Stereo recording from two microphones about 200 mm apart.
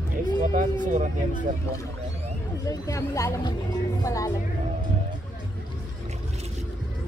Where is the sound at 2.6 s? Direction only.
15° left (ahead or behind).